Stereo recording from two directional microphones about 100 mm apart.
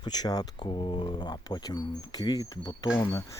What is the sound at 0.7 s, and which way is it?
Speech, 55° left (ahead or behind).